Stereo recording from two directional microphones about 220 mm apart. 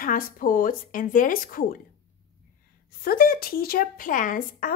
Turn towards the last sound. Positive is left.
turn(degrees=40)  # may be behind; listen again after turning